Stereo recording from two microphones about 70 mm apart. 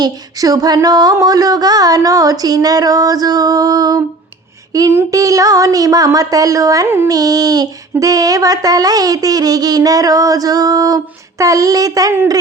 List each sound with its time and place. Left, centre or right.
0.0 s child singing: right
6.8 s a sound: right
7.1 s child singing: right